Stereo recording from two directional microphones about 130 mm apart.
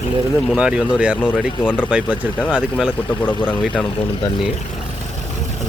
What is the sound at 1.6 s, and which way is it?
Speech, 15° left (ahead or behind).